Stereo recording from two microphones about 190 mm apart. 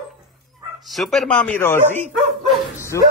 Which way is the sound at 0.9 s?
Centre (ahead or behind).